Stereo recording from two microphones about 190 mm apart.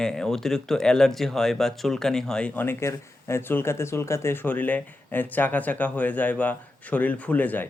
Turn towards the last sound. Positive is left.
turn(degrees=10)  # may be behind; listen again after turning